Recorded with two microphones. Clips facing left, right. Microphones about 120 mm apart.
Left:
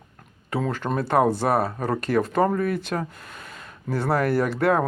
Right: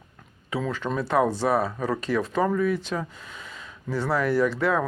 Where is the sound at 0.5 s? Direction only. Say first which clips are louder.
Left 2 dB; 50° left (ahead or behind).